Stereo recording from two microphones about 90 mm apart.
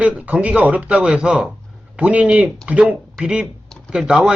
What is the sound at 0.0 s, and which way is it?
Speech, 15° right (ahead or behind).